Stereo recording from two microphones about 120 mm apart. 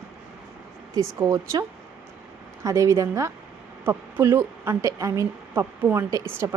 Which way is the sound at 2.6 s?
25° right (ahead or behind).